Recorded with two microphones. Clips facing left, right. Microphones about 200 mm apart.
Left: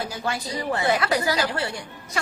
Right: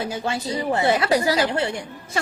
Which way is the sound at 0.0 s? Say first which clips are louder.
Right 3 dB; 25° right (ahead or behind).